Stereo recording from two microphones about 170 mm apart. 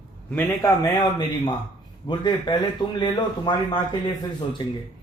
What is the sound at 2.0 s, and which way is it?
A man's voice, 25° left (ahead or behind).